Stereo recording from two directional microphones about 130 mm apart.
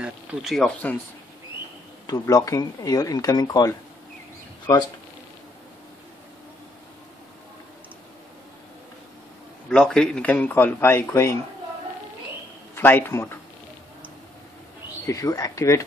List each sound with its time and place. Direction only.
0.0 s speech: 5° right (ahead or behind)
2.0 s speech: 25° left (ahead or behind)
9.7 s a man's voice: 5° left (ahead or behind); by 11.3 s 20° left (ahead or behind)
12.7 s a man's voice: 15° left (ahead or behind)
15.0 s speech: 25° left (ahead or behind)